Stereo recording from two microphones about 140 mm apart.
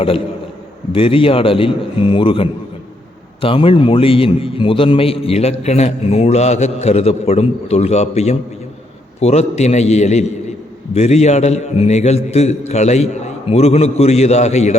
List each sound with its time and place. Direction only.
0.9 s a man's voice: 40° left (ahead or behind)